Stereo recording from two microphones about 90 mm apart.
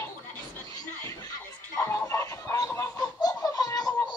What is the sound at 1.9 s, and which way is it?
Chicken, 35° left (ahead or behind).